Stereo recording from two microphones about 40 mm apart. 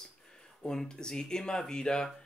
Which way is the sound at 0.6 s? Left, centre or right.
Centre.